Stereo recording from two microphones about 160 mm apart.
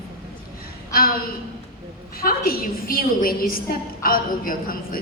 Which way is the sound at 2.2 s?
65° left (ahead or behind).